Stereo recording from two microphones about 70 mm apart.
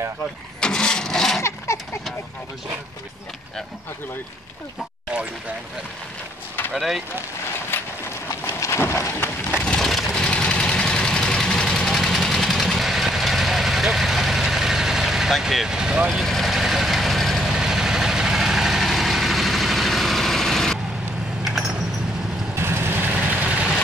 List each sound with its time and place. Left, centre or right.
0.6 s engine starting: centre
1.7 s a sound: left
6.7 s speech: centre
7.7 s train: left
8.5 s a sound: left
9.7 s vehicle: centre
16.1 s vehicle: centre
17.6 s vehicle: centre
22.6 s vehicle: right